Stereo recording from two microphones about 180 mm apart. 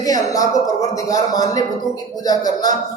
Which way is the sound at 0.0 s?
20° left (ahead or behind).